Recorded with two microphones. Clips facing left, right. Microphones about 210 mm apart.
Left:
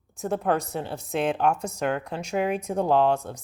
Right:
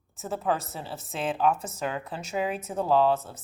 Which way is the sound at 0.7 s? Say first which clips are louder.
Left 7 dB; 5° right (ahead or behind).